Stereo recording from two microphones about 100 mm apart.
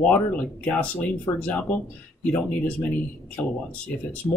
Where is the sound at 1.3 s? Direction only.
30° left (ahead or behind).